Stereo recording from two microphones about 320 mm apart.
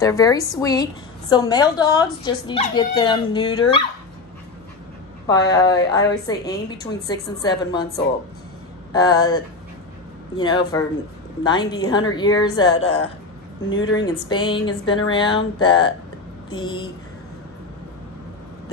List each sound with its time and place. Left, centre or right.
0.0 s a woman's voice: centre
5.3 s a woman's voice: centre
8.9 s a woman's voice: centre
13.7 s speech: left
13.9 s a woman's voice: centre